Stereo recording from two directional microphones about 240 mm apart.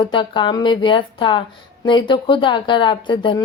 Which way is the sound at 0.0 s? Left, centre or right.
Centre.